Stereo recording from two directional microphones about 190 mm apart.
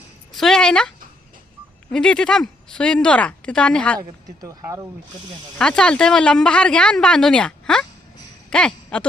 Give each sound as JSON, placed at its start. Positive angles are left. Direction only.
{"t": 0.3, "sound": "a sound", "side_deg": 0}
{"t": 1.9, "sound": "speech", "side_deg": 5}
{"t": 4.4, "sound": "speech", "side_deg": -15}
{"t": 5.5, "sound": "speech", "side_deg": 5}